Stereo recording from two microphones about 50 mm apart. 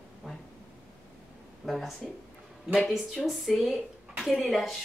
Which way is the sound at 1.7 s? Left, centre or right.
Centre.